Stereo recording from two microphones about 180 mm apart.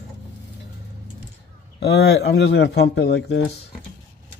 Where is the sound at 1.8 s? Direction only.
65° left (ahead or behind).